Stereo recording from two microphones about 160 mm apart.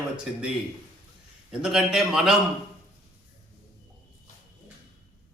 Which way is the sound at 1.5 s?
5° right (ahead or behind).